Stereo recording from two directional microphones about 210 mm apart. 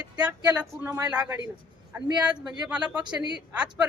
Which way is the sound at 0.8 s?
15° right (ahead or behind).